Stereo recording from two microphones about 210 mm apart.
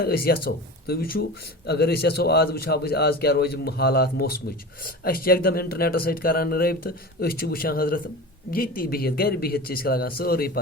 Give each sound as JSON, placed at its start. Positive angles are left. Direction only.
{"t": 0.0, "sound": "a man's voice", "side_deg": 45}